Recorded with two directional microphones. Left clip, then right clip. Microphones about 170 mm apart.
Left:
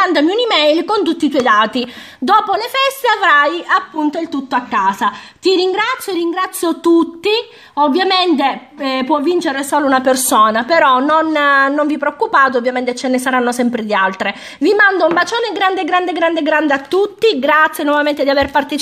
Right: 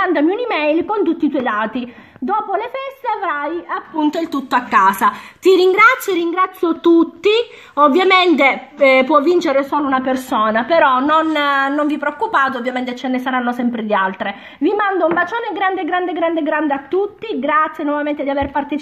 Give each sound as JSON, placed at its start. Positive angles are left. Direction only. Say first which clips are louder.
{"t": 0.0, "sound": "a woman's voice", "louder": "left 3 dB", "side_deg": 40}
{"t": 4.1, "sound": "a woman's voice", "louder": "even", "side_deg": 25}
{"t": 9.8, "sound": "a woman's voice", "louder": "left 5 dB", "side_deg": 60}